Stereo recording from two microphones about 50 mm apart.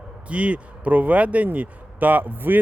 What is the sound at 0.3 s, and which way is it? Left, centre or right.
Speech, right.